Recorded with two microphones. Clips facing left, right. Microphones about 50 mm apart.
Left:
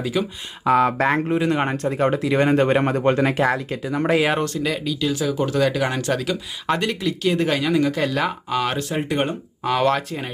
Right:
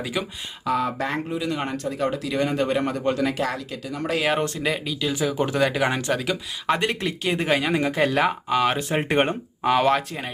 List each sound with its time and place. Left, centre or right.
0.0 s speech: centre
0.6 s speech: left
4.6 s speech: centre
6.7 s speech: right
8.3 s speech: centre
8.9 s speech: right
9.6 s speech: centre